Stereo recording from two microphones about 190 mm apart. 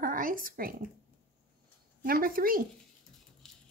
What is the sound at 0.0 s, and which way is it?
Speech, 45° right (ahead or behind).